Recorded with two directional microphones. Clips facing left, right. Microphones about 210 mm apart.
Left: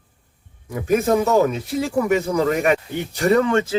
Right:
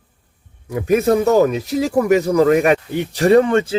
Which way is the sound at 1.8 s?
40° right (ahead or behind).